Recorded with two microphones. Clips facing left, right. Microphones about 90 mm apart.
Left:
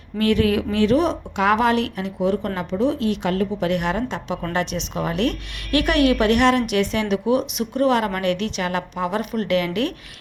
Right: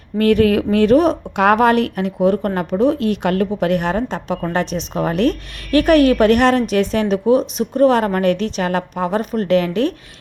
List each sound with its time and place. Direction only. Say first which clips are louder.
0.2 s speech: right 5 dB; 50° right (ahead or behind)
3.8 s a woman's voice: right 4 dB; 40° right (ahead or behind)